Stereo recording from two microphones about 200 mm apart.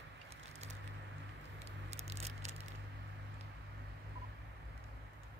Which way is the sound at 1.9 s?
30° right (ahead or behind).